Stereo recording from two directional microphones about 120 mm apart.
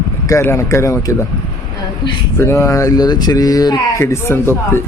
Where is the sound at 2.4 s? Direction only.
25° left (ahead or behind).